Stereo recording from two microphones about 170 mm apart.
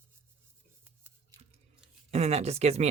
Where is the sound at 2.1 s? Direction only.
40° right (ahead or behind).